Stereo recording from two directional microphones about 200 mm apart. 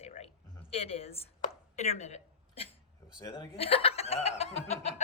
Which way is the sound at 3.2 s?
20° left (ahead or behind).